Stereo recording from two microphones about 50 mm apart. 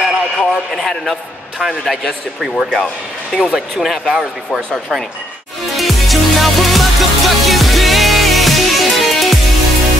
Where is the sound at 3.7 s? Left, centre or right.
Centre.